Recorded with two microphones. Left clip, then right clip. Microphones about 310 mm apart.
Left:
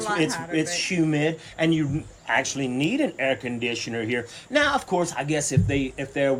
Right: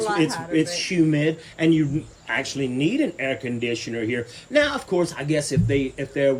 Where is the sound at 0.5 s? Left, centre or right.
Centre.